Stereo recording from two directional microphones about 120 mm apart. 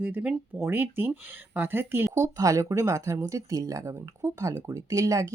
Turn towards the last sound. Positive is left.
turn(degrees=-25)  # may be behind; listen again after turning